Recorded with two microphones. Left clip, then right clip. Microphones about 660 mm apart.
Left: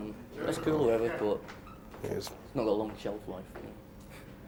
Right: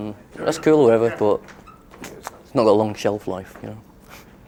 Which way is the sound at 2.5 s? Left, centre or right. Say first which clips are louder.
Right 15 dB; right.